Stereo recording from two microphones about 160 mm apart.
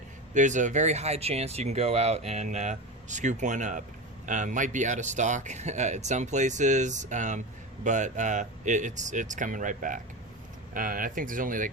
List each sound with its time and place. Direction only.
0.3 s speech: 50° right (ahead or behind)